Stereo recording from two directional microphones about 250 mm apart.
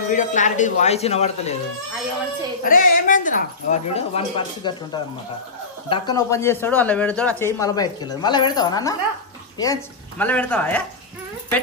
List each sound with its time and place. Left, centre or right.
0.1 s speech: left
2.6 s speech: left; by 10.8 s centre